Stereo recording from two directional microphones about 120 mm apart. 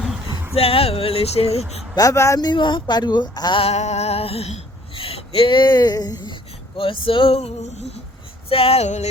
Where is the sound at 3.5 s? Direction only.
60° left (ahead or behind); by 6.2 s 35° left (ahead or behind).